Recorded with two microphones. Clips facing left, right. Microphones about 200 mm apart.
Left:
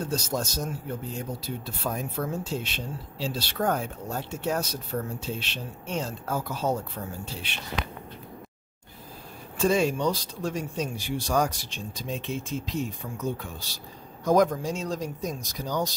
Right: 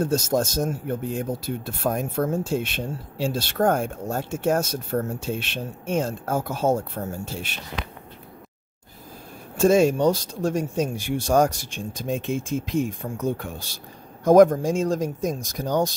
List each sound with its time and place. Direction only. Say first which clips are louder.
0.0 s speech: right 7 dB; 50° right (ahead or behind)
9.6 s speech: right 6 dB; 45° right (ahead or behind)